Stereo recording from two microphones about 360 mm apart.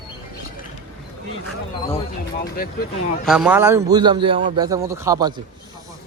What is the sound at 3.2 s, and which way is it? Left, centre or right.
A man's voice, centre.